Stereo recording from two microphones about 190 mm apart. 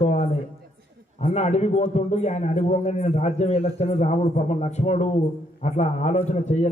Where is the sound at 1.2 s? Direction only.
35° left (ahead or behind).